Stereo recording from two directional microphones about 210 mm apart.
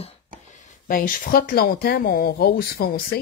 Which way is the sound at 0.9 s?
45° left (ahead or behind).